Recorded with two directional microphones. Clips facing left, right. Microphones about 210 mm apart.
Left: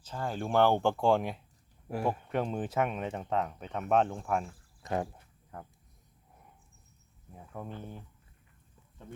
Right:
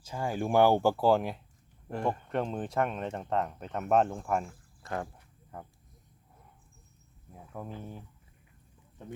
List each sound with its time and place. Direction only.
0.0 s speech: 10° right (ahead or behind)
4.8 s a sound: 20° left (ahead or behind)
7.3 s speech: 5° right (ahead or behind)